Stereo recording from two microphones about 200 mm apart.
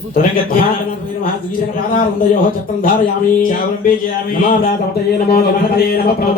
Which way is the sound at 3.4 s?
45° left (ahead or behind).